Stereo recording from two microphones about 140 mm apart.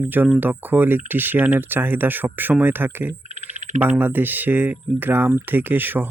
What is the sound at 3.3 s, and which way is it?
Frog, 55° right (ahead or behind).